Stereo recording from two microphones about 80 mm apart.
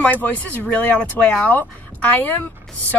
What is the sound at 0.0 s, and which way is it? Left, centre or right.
Speech, centre.